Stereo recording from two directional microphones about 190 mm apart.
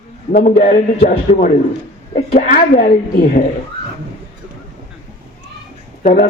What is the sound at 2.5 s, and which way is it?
Speech, 50° left (ahead or behind).